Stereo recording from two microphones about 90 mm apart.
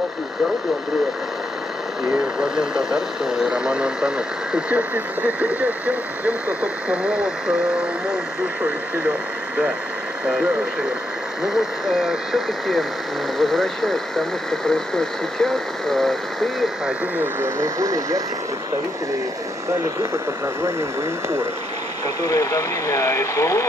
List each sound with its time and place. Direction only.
2.0 s speech: 5° right (ahead or behind)
10.2 s speech: 10° right (ahead or behind)
17.2 s speech: 30° right (ahead or behind)
19.7 s speech: 30° right (ahead or behind)
22.2 s speech: 35° left (ahead or behind)